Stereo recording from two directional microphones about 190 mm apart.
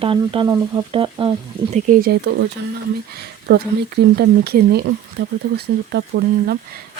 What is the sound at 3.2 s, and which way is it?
Speech, 55° right (ahead or behind).